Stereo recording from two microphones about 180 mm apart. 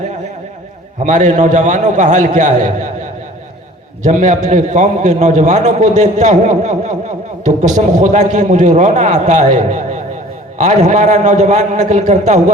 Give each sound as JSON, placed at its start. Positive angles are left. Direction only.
{"t": 1.0, "sound": "a man's voice", "side_deg": -45}